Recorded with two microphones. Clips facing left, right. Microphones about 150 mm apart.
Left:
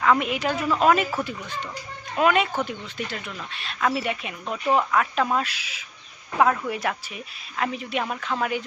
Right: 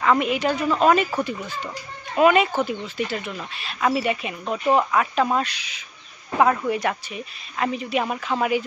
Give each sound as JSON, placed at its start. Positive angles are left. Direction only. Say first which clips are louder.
{"t": 0.0, "sound": "a woman's voice", "louder": "right 2 dB", "side_deg": 0}